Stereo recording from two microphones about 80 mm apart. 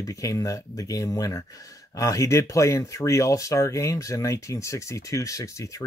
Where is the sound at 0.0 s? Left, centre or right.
Left.